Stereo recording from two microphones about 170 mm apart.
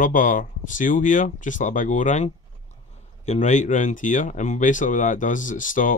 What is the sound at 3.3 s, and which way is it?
Speech, 45° left (ahead or behind).